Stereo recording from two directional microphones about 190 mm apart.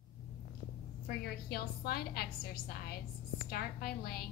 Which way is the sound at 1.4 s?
55° left (ahead or behind).